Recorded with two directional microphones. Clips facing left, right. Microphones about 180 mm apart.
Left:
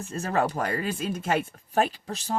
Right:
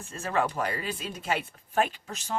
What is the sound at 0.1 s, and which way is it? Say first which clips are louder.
Speech: left 2 dB; 40° left (ahead or behind).